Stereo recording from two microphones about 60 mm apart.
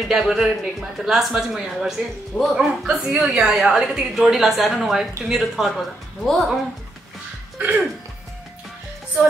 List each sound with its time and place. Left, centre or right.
0.1 s a woman's voice: centre
7.5 s music: right